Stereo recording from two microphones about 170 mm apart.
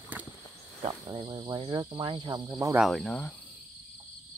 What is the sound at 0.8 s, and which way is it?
Cricket, 30° right (ahead or behind).